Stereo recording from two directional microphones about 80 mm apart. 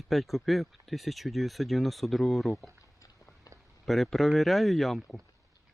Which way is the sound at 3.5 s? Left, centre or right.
Left.